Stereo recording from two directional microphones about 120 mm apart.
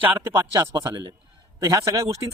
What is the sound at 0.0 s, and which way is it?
A man's voice, 15° right (ahead or behind).